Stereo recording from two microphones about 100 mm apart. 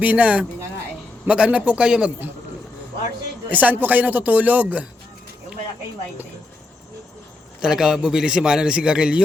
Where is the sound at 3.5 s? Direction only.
15° right (ahead or behind).